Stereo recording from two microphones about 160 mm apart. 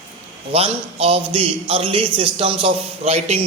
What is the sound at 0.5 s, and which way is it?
A man's voice, 35° right (ahead or behind).